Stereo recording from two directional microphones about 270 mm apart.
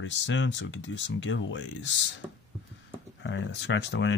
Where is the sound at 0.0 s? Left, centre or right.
Left.